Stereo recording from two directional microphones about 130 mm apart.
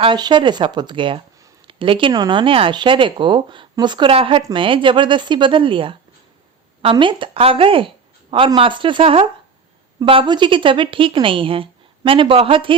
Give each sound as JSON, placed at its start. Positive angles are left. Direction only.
{"t": 0.0, "sound": "speech", "side_deg": -35}